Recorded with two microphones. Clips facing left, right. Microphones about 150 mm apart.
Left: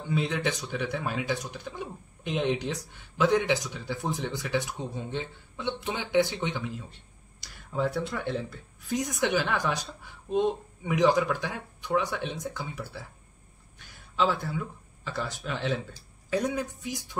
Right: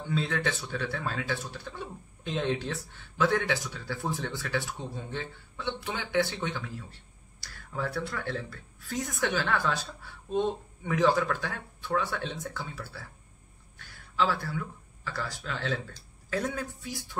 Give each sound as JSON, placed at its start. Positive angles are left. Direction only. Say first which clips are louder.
{"t": 0.1, "sound": "speech", "louder": "left 2 dB", "side_deg": 15}